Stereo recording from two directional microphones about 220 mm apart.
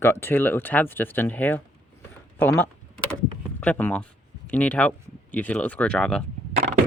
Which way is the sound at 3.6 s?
5° left (ahead or behind).